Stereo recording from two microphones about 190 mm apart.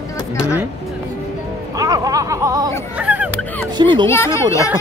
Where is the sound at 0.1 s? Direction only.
15° left (ahead or behind).